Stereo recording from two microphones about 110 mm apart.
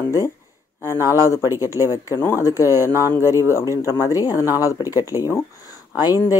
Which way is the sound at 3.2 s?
25° right (ahead or behind).